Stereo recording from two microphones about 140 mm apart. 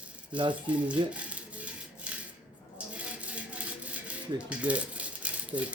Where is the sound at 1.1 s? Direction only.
10° right (ahead or behind).